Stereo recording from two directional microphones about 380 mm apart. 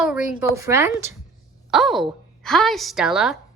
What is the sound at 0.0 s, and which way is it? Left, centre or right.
A woman's voice, centre.